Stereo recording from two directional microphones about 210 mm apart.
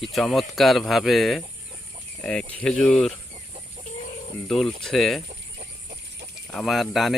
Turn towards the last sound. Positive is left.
turn(degrees=0)  # may be behind; listen again after turning